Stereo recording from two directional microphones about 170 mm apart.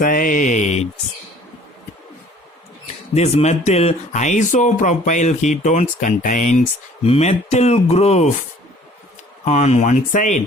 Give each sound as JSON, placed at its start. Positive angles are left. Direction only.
{"t": 0.0, "sound": "speech", "side_deg": 55}
{"t": 2.8, "sound": "speech", "side_deg": 40}
{"t": 9.4, "sound": "speech", "side_deg": 40}